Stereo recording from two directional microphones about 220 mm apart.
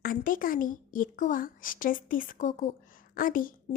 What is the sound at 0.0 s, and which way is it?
Speech, 40° left (ahead or behind).